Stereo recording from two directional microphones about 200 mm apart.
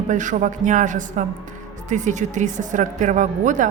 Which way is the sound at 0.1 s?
40° right (ahead or behind).